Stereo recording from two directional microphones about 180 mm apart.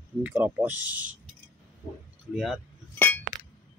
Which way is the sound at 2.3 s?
Centre (ahead or behind).